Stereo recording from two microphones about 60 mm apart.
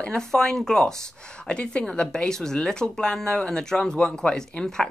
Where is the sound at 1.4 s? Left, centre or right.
Centre.